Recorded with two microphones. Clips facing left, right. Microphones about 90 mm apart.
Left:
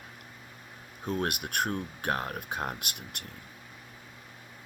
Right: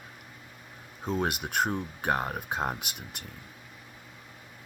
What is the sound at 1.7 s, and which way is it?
Speech, 10° right (ahead or behind).